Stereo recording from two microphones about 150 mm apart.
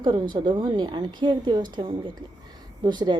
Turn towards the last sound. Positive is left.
turn(degrees=-30)  # may be behind; listen again after turning